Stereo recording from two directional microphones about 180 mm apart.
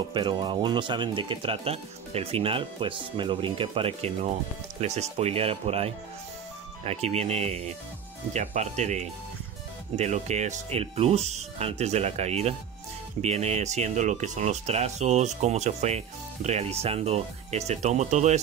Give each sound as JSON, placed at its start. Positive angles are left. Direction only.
{"t": 0.1, "sound": "speech", "side_deg": -25}